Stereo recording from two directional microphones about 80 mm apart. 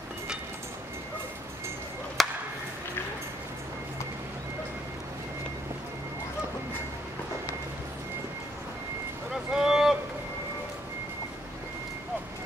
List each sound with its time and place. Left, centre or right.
2.2 s chop: centre
9.3 s vehicle: centre